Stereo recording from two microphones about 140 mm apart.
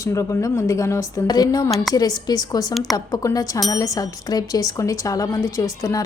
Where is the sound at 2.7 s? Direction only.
Centre (ahead or behind).